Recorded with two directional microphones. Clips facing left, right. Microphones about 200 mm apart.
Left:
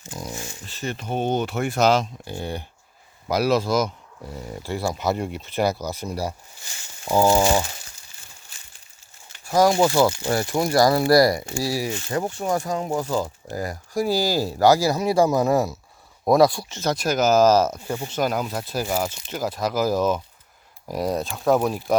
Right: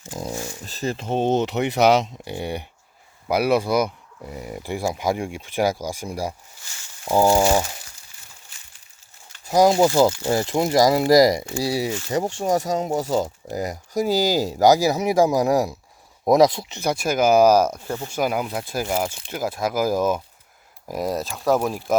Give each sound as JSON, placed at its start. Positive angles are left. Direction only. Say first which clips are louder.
{"t": 0.1, "sound": "speech", "louder": "right 4 dB", "side_deg": -35}
{"t": 9.4, "sound": "speech", "louder": "right 2 dB", "side_deg": -20}
{"t": 17.7, "sound": "speech", "louder": "even", "side_deg": 10}
{"t": 18.1, "sound": "speech", "louder": "right 1 dB", "side_deg": -10}